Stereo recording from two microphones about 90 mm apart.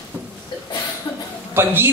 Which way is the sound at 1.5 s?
25° right (ahead or behind).